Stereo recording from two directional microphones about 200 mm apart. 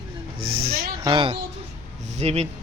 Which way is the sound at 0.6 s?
50° right (ahead or behind).